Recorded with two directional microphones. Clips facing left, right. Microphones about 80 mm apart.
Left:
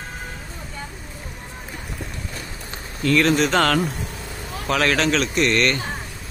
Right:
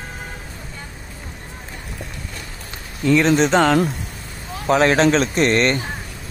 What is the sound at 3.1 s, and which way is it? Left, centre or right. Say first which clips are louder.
Speech: right 3 dB; right.